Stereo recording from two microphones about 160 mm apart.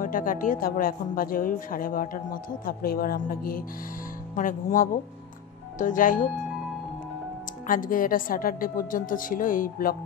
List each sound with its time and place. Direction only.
0.0 s a woman's voice: 60° left (ahead or behind)
7.6 s a woman's voice: 60° left (ahead or behind)